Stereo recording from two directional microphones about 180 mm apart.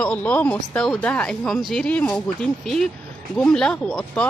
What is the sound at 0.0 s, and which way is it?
Speech, 5° left (ahead or behind).